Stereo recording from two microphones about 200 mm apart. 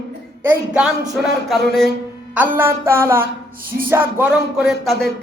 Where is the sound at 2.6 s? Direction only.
10° right (ahead or behind).